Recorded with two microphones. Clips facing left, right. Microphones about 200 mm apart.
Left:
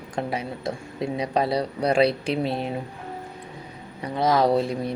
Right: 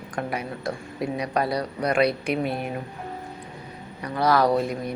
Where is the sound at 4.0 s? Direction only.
20° left (ahead or behind).